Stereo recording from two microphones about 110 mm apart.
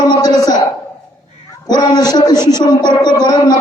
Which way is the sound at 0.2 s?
35° left (ahead or behind).